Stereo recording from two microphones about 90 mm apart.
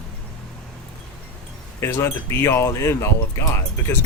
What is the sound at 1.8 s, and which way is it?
Speech, 30° left (ahead or behind).